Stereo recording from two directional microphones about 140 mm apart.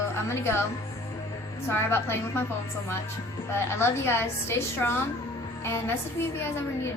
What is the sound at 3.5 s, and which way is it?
A woman's voice, 15° left (ahead or behind).